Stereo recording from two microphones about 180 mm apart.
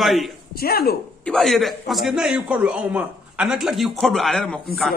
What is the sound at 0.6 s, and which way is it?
Speech, 60° left (ahead or behind).